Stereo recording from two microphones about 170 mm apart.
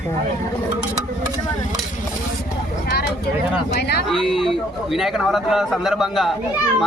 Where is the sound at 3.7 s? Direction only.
70° left (ahead or behind).